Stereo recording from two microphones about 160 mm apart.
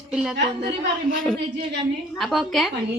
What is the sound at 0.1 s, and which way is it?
Speech, 5° right (ahead or behind).